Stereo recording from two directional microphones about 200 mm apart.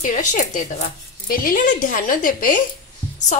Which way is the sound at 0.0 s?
40° left (ahead or behind).